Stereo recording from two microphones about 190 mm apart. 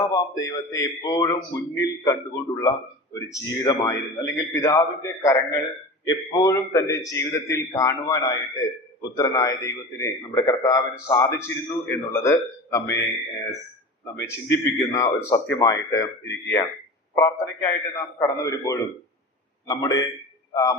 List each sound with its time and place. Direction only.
0.1 s speech: 15° left (ahead or behind)
14.0 s a man's voice: 15° left (ahead or behind)